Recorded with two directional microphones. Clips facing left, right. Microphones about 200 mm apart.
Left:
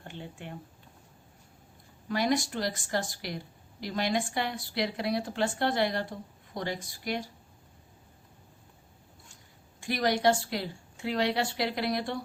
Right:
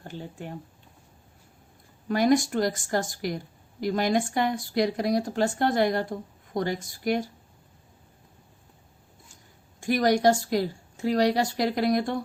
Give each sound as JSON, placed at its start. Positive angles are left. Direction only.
{"t": 0.0, "sound": "speech", "side_deg": -40}
{"t": 2.0, "sound": "a woman's voice", "side_deg": -45}
{"t": 9.8, "sound": "a woman's voice", "side_deg": -45}